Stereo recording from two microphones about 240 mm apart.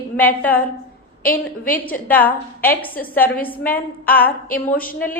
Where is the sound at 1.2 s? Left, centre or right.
Left.